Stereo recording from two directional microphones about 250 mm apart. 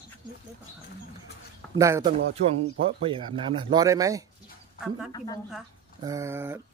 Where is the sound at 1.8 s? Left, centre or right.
Centre.